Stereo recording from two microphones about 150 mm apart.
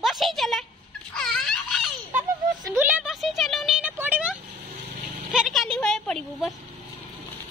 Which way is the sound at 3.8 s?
10° right (ahead or behind).